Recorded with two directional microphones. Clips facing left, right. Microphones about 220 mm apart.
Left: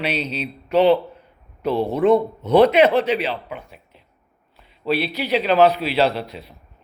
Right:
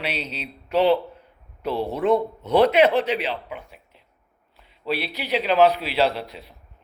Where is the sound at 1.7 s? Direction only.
15° left (ahead or behind).